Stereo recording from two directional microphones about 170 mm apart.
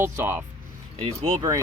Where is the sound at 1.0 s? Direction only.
30° right (ahead or behind).